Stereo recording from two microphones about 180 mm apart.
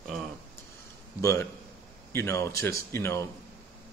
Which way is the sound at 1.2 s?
15° left (ahead or behind).